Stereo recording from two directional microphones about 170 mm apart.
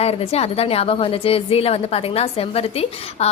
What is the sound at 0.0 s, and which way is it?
A woman's voice, 35° left (ahead or behind).